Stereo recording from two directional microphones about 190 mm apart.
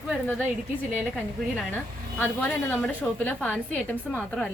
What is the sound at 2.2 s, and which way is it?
A woman's voice, 10° left (ahead or behind).